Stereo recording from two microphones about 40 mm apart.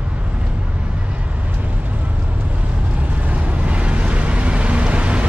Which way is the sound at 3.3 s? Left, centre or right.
Right.